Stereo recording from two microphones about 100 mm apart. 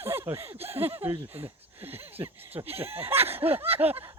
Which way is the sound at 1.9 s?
80° right.